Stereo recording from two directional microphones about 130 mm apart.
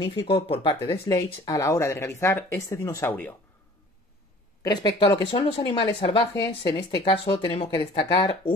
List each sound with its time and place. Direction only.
0.0 s speech: 45° left (ahead or behind)
1.0 s speech: 30° left (ahead or behind)
4.6 s speech: 35° left (ahead or behind)